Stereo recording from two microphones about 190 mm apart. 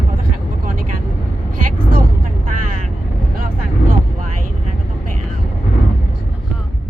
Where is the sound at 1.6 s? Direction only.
45° right (ahead or behind).